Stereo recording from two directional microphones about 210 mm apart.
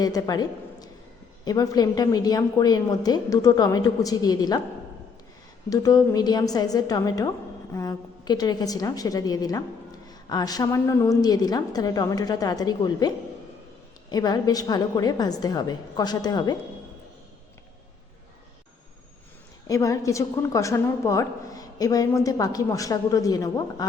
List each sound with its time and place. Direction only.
0.0 s a woman's voice: 20° left (ahead or behind)
5.6 s a woman's voice: 15° left (ahead or behind)
19.6 s a woman's voice: 15° left (ahead or behind)